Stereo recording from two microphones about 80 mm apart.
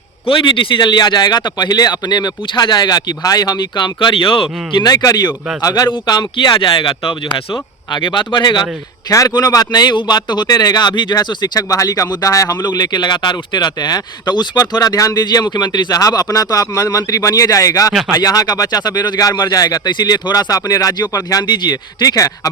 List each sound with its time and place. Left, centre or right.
0.3 s speech: left
4.9 s speech: left
5.9 s speech: left
7.9 s speech: left
9.0 s speech: left
11.7 s speech: left
12.6 s speech: left
21.4 s speech: left
22.0 s speech: left